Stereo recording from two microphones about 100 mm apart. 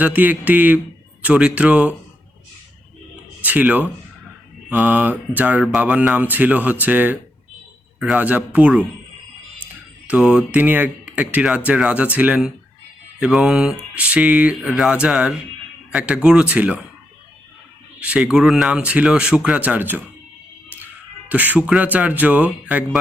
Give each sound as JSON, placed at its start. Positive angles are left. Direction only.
{"t": 0.0, "sound": "speech", "side_deg": -15}
{"t": 3.4, "sound": "speech", "side_deg": -15}
{"t": 10.1, "sound": "speech", "side_deg": -10}
{"t": 18.0, "sound": "speech", "side_deg": -10}
{"t": 21.2, "sound": "speech", "side_deg": -15}